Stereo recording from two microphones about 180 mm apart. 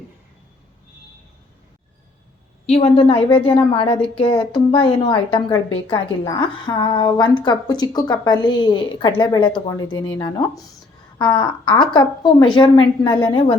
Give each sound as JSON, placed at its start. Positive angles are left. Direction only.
{"t": 2.6, "sound": "a woman's voice", "side_deg": 35}